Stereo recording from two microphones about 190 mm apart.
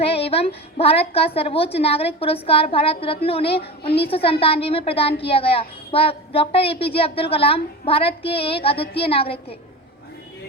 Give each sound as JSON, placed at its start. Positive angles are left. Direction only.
{"t": 0.0, "sound": "a woman's voice", "side_deg": 30}